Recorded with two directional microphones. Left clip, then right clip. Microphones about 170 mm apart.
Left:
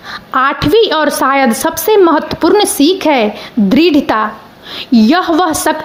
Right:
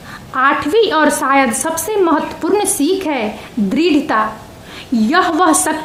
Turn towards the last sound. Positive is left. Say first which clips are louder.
# left 1 dB
turn(degrees=25)  # may be behind; listen again after turning